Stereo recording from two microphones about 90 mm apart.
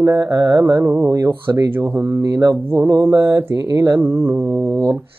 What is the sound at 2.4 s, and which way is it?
Speech, 25° right (ahead or behind).